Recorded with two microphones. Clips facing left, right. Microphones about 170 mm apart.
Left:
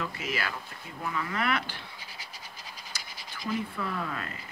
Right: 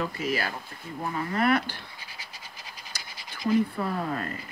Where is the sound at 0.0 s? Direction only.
40° right (ahead or behind).